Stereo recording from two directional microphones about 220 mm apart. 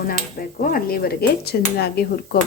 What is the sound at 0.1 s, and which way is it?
Speech, 40° left (ahead or behind).